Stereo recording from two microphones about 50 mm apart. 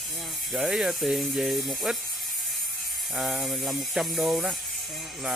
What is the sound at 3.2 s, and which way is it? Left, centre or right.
Speech, centre.